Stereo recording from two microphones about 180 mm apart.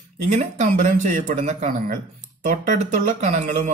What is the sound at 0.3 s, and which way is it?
Speech, 40° right (ahead or behind).